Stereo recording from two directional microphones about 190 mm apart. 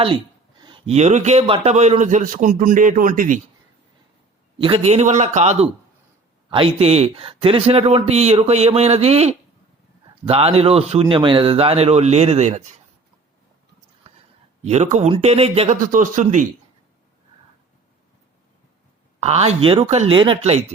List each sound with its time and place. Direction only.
0.6 s speech: 30° right (ahead or behind)
4.5 s speech: 30° right (ahead or behind)
14.6 s speech: 35° right (ahead or behind)
15.8 s speech: 45° right (ahead or behind)
19.2 s speech: 35° right (ahead or behind)